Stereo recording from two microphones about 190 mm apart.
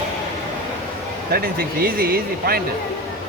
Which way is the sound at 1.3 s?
55° right (ahead or behind).